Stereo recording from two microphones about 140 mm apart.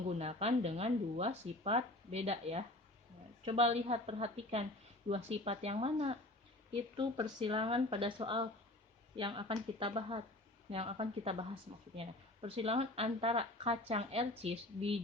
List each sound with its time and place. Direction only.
0.2 s speech: 50° right (ahead or behind)
6.9 s speech: 35° right (ahead or behind)